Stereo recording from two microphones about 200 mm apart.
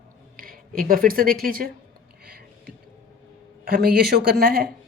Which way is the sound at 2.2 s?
50° right (ahead or behind).